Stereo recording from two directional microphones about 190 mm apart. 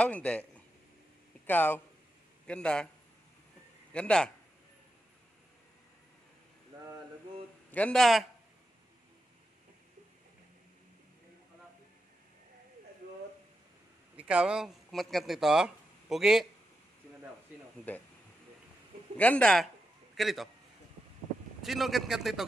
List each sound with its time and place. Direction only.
0.0 s a man's voice: 5° left (ahead or behind)
3.9 s a man's voice: 5° left (ahead or behind)
7.7 s a man's voice: 5° left (ahead or behind)
14.1 s speech: 5° right (ahead or behind)
17.9 s speech: 10° left (ahead or behind)
19.1 s a man's voice: 5° left (ahead or behind)
21.6 s a man's voice: centre (ahead or behind)